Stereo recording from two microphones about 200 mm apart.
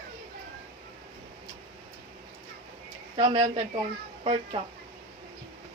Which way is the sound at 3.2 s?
25° right (ahead or behind).